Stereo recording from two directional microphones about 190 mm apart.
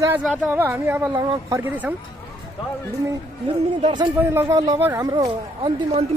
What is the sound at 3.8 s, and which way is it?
Speech, 25° right (ahead or behind).